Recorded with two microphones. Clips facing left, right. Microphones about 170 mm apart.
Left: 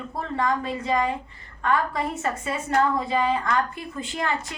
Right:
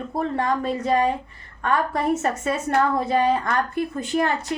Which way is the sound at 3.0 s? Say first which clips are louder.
Right 3 dB; 60° right (ahead or behind).